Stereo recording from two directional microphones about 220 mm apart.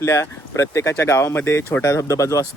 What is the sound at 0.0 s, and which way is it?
Speech, 15° left (ahead or behind).